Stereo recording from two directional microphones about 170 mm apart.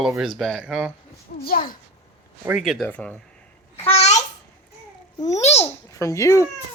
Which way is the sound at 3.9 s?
40° left (ahead or behind).